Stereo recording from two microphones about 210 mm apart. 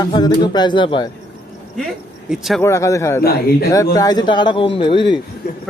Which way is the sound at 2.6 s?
15° left (ahead or behind).